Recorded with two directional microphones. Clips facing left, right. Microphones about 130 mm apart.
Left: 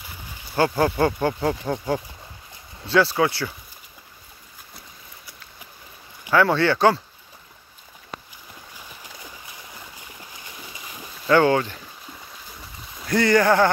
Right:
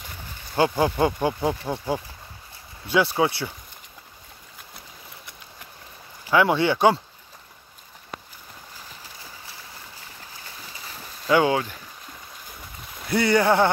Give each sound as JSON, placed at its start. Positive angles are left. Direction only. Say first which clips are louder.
{"t": 0.6, "sound": "speech", "louder": "left 1 dB", "side_deg": -10}
{"t": 2.9, "sound": "speech", "louder": "left 2 dB", "side_deg": -20}
{"t": 6.3, "sound": "speech", "louder": "left 1 dB", "side_deg": -15}
{"t": 10.4, "sound": "a sound", "louder": "even", "side_deg": 15}
{"t": 11.2, "sound": "speech", "louder": "left 2 dB", "side_deg": -10}
{"t": 13.0, "sound": "speech", "louder": "left 2 dB", "side_deg": -10}